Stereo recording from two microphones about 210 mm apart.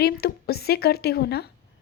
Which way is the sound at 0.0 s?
50° left (ahead or behind).